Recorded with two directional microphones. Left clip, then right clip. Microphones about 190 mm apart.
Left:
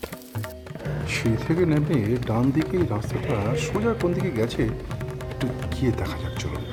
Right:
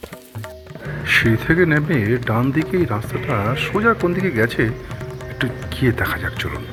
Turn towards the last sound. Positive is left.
turn(degrees=-5)  # may be behind; listen again after turning